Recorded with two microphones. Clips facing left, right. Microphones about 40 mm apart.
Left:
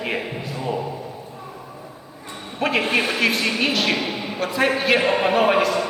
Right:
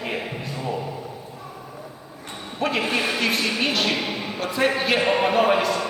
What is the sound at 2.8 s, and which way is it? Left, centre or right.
Speech, left.